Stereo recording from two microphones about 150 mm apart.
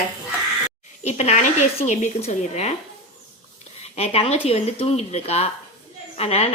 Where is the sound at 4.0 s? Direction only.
45° left (ahead or behind).